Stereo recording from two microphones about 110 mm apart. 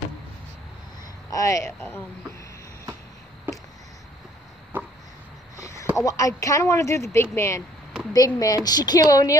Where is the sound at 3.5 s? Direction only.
20° right (ahead or behind).